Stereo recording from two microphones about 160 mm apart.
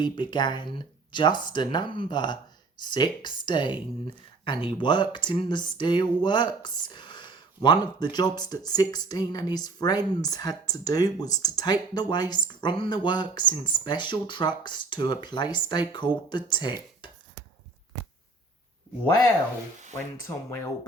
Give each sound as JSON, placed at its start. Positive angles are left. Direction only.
{"t": 0.0, "sound": "speech", "side_deg": 30}
{"t": 17.0, "sound": "a sound", "side_deg": 30}
{"t": 20.0, "sound": "rub", "side_deg": 15}